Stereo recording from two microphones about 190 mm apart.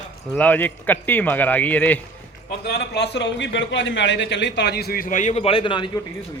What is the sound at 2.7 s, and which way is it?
A man's voice, 60° left (ahead or behind).